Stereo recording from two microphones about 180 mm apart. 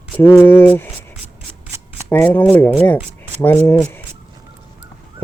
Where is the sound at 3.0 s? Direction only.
10° right (ahead or behind).